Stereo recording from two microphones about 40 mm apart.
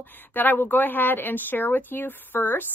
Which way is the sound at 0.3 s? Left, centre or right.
Left.